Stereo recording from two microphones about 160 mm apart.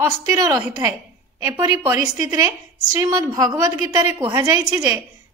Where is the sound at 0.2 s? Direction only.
20° right (ahead or behind).